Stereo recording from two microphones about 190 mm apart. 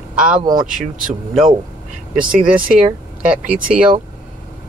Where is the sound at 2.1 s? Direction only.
5° right (ahead or behind).